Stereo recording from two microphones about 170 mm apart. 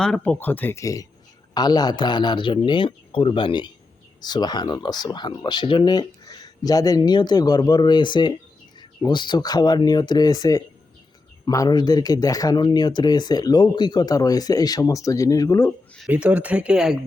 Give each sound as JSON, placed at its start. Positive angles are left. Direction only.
{"t": 0.0, "sound": "speech", "side_deg": 5}
{"t": 16.0, "sound": "speech", "side_deg": -5}